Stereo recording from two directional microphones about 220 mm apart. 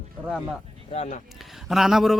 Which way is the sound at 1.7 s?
Centre (ahead or behind).